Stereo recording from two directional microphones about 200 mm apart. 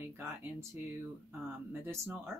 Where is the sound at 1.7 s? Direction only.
10° right (ahead or behind).